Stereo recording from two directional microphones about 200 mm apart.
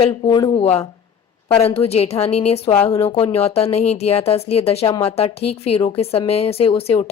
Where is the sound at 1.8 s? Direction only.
30° left (ahead or behind).